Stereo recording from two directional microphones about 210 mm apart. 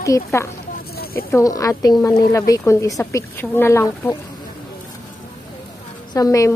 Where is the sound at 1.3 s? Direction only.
15° left (ahead or behind).